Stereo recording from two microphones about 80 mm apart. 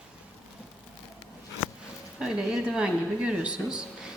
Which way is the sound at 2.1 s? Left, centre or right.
Centre.